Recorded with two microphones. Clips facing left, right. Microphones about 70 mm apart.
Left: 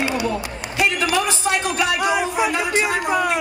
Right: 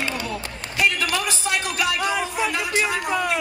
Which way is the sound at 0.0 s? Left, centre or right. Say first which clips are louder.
Left 6 dB; centre.